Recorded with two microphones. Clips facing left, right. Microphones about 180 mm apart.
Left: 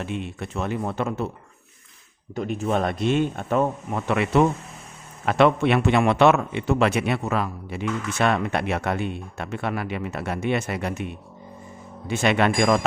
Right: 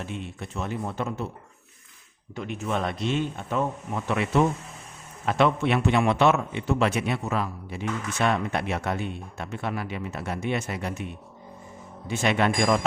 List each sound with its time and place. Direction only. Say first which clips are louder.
0.0 s a man's voice: left 5 dB; 70° left (ahead or behind)
2.3 s speech: left 5 dB; 40° left (ahead or behind)
2.8 s a man's voice: left 5 dB; 55° left (ahead or behind)
12.0 s a man's voice: left 3 dB; 70° left (ahead or behind)